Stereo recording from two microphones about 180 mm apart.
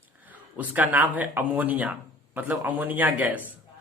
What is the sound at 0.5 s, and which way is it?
Speech, 10° right (ahead or behind).